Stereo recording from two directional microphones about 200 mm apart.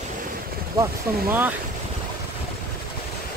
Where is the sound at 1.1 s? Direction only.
10° right (ahead or behind).